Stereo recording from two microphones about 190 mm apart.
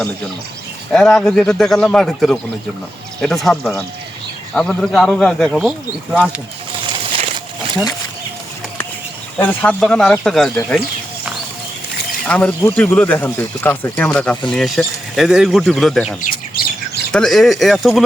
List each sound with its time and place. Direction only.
0.9 s speech: 5° left (ahead or behind)
6.8 s bird: 25° right (ahead or behind)
9.4 s speech: 10° left (ahead or behind)
12.3 s speech: 10° left (ahead or behind)
16.2 s squawk: 50° left (ahead or behind)
17.1 s speech: 5° left (ahead or behind)